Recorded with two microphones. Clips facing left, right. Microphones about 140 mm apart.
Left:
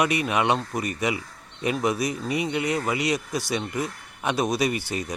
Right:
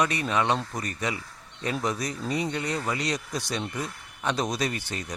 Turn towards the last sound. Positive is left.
turn(degrees=10)  # may be behind; listen again after turning